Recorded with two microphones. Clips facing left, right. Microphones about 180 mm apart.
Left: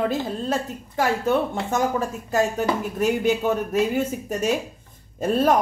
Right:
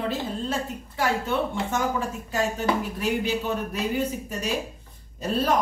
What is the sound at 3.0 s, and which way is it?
Speech, 50° left (ahead or behind).